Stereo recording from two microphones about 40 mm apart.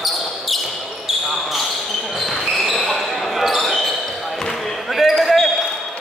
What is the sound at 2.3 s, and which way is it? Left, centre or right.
Basketball bounce, centre.